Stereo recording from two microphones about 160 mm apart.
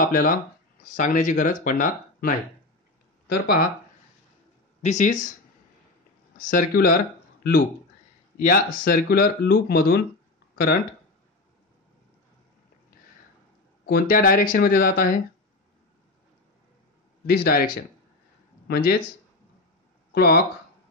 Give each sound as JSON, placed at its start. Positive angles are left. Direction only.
{"t": 0.0, "sound": "speech", "side_deg": 55}
{"t": 3.3, "sound": "speech", "side_deg": 80}
{"t": 4.8, "sound": "speech", "side_deg": 50}
{"t": 6.3, "sound": "speech", "side_deg": 55}
{"t": 8.4, "sound": "speech", "side_deg": 60}
{"t": 10.5, "sound": "a sound", "side_deg": 70}
{"t": 13.8, "sound": "speech", "side_deg": 65}
{"t": 17.3, "sound": "speech", "side_deg": 70}
{"t": 18.7, "sound": "speech", "side_deg": 65}
{"t": 20.1, "sound": "speech", "side_deg": 75}